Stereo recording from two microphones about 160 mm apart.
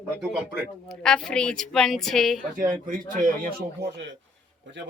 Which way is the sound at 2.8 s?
55° right (ahead or behind).